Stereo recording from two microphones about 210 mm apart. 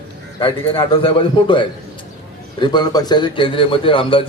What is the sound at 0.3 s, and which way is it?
A man's voice, 25° left (ahead or behind).